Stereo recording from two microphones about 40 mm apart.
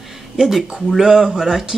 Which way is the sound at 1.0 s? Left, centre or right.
Centre.